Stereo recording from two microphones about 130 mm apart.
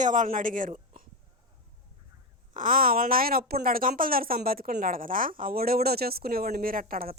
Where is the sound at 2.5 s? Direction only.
90° right.